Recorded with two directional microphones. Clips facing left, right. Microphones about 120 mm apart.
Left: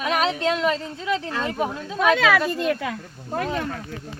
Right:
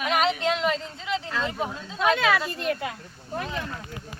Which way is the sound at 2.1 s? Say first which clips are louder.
Left 4 dB; 90° left.